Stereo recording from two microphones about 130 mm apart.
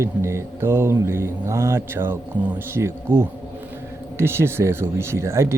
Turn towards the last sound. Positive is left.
turn(degrees=-20)  # may be behind; listen again after turning